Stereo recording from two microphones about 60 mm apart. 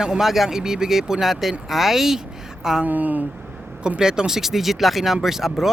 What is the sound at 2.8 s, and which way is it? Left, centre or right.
Speech, right.